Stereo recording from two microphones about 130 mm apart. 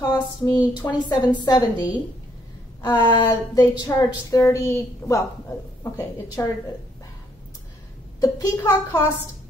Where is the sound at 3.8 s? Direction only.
25° left (ahead or behind).